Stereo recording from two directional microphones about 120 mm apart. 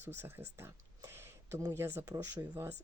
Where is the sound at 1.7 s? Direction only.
20° right (ahead or behind).